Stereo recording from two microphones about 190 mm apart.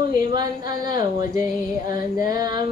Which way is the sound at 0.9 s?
20° right (ahead or behind).